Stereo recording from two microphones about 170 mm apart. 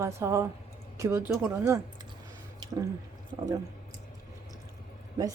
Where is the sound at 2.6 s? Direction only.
25° right (ahead or behind).